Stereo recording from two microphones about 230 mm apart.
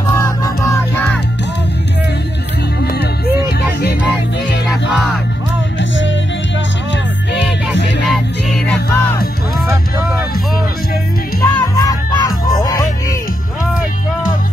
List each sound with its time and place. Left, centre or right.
0.1 s music: centre
2.8 s music: left
4.6 s music: centre
5.8 s music: left
8.0 s music: centre
11.4 s music: centre